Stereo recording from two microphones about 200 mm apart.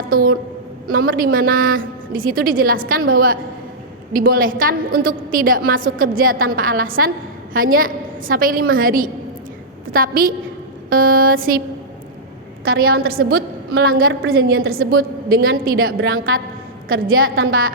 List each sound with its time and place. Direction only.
0.1 s a woman's voice: 45° right (ahead or behind)
12.8 s a woman's voice: 50° right (ahead or behind)
17.1 s a woman's voice: 90° right